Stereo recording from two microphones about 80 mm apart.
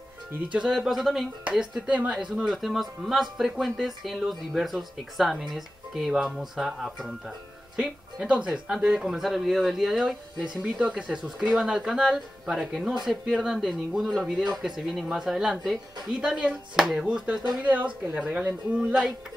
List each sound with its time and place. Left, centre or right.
0.6 s a woman's voice: centre